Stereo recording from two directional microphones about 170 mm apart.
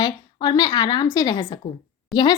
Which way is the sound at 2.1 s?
Centre (ahead or behind).